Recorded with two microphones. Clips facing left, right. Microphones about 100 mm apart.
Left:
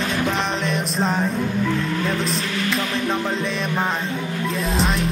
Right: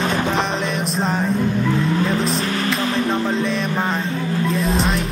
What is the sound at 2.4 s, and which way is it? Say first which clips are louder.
Speech: right 3 dB; 40° right (ahead or behind).